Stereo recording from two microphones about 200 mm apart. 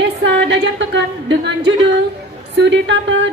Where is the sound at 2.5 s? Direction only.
65° right (ahead or behind).